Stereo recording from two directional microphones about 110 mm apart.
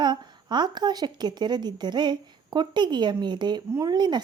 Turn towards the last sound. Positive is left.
turn(degrees=-40)  # may be behind; listen again after turning